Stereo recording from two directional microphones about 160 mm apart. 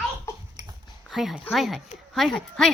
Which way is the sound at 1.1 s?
Centre (ahead or behind).